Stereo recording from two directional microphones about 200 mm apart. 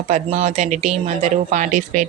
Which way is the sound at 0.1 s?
35° right (ahead or behind).